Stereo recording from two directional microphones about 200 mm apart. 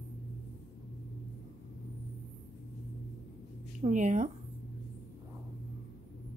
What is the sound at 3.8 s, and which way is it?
Speech, 40° right (ahead or behind).